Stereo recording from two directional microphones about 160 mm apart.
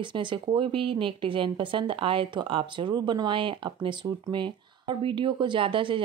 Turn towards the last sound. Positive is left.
turn(degrees=-30)  # may be behind; listen again after turning